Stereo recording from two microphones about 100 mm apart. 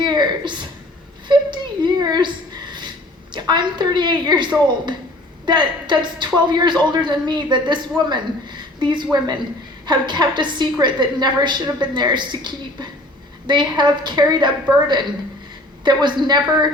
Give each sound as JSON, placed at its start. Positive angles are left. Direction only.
{"t": 0.0, "sound": "a sound", "side_deg": -50}
{"t": 3.3, "sound": "a woman's voice", "side_deg": -50}
{"t": 5.5, "sound": "a woman's voice", "side_deg": -50}